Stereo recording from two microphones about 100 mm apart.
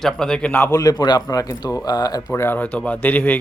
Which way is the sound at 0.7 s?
35° left (ahead or behind).